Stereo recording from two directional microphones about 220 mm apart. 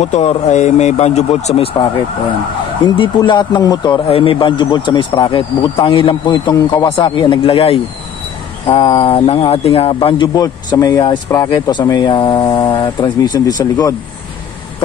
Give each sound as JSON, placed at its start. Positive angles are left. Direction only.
{"t": 0.0, "sound": "speech", "side_deg": 30}